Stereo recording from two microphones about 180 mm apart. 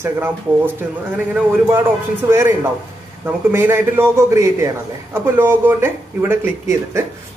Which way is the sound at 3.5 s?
15° right (ahead or behind).